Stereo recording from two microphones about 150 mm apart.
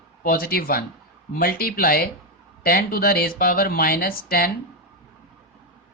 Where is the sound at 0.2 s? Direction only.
75° left (ahead or behind).